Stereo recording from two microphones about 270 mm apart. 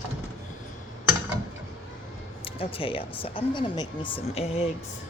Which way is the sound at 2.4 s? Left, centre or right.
Centre.